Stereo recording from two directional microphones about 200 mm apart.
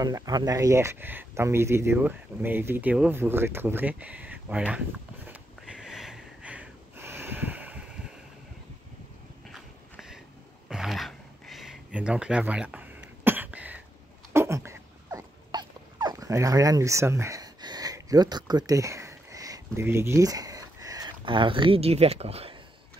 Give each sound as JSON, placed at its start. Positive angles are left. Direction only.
{"t": 0.0, "sound": "speech", "side_deg": -20}
{"t": 9.5, "sound": "a sound", "side_deg": 0}
{"t": 14.3, "sound": "dog", "side_deg": -15}